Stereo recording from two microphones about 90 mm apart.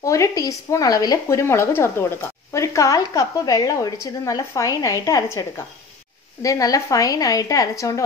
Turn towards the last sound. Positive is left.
turn(degrees=35)  # may be behind; listen again after turning